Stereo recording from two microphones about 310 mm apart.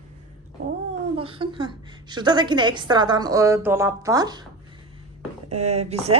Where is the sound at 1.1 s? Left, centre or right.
Centre.